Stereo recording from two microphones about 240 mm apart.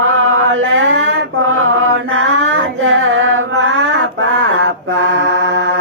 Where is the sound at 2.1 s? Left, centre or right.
Right.